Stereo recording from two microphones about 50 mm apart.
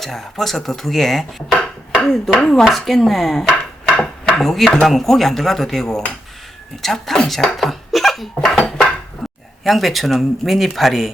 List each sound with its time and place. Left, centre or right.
0.0 s speech: centre
3.6 s dishes: centre
4.4 s speech: centre
8.4 s dishes: centre
9.2 s a sound: centre
9.6 s speech: centre